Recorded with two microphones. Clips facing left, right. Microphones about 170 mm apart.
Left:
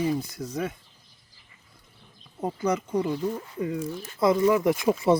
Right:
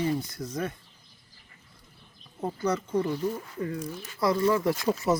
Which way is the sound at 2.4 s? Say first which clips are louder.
Left 2 dB; 15° left (ahead or behind).